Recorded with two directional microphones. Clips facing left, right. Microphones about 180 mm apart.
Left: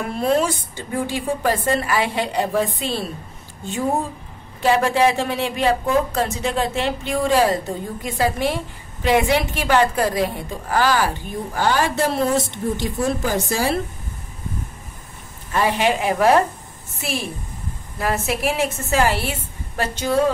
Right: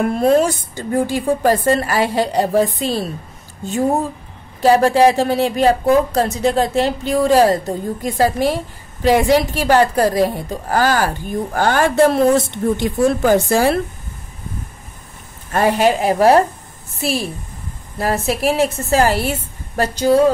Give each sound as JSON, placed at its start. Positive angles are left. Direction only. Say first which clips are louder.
{"t": 0.0, "sound": "speech", "louder": "right 6 dB", "side_deg": -45}
{"t": 4.6, "sound": "a woman's voice", "louder": "right 5 dB", "side_deg": -40}
{"t": 15.5, "sound": "speech", "louder": "right 5 dB", "side_deg": -45}